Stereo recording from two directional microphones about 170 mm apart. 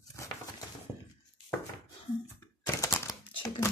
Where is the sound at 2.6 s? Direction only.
15° left (ahead or behind).